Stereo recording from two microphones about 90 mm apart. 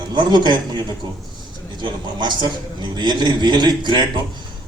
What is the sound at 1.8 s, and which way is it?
A man's voice, 55° right (ahead or behind).